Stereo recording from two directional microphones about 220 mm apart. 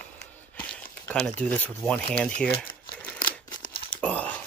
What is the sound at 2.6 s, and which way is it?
Crumpling, 5° left (ahead or behind).